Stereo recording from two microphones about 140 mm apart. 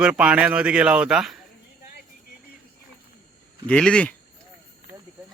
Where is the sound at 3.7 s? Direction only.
5° left (ahead or behind).